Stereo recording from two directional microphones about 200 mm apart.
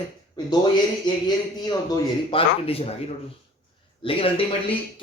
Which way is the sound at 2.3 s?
30° left (ahead or behind).